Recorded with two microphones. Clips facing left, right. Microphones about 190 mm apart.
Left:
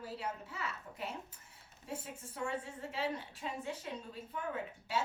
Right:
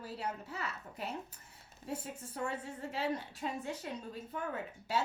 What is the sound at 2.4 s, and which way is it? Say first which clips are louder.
A woman's voice: even; 40° right (ahead or behind).